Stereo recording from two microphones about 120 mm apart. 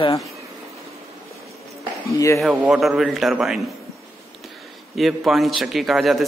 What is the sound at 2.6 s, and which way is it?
A man's voice, centre (ahead or behind).